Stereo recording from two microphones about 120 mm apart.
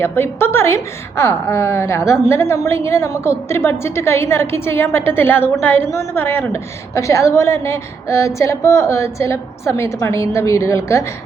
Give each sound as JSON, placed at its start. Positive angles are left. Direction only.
{"t": 0.0, "sound": "a woman's voice", "side_deg": 20}